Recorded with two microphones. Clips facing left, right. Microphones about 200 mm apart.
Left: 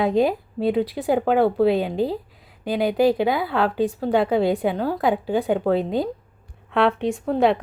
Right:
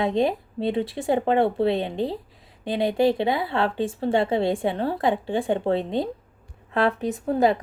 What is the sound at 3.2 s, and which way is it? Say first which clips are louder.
Speech: left 2 dB; 25° right (ahead or behind).